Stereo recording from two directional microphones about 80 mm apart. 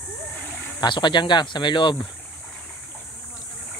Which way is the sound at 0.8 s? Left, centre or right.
Left.